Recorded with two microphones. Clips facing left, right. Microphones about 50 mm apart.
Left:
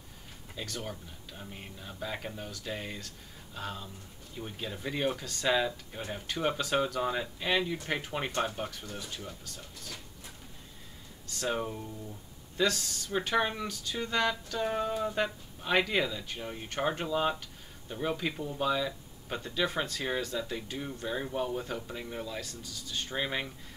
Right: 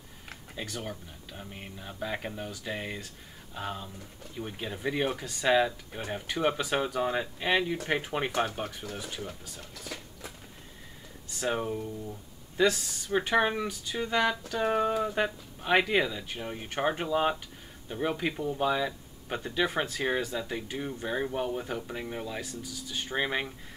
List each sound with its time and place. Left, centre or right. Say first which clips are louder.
0.6 s speech: right 2 dB; right
0.8 s speech: right 2 dB; centre
11.2 s speech: right 2 dB; centre
15.0 s speech: right 2 dB; centre